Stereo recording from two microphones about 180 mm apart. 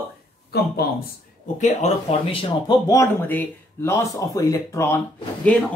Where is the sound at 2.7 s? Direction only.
20° left (ahead or behind).